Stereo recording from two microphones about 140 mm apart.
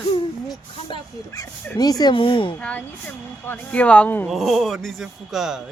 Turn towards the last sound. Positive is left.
turn(degrees=-5)  # may be behind; listen again after turning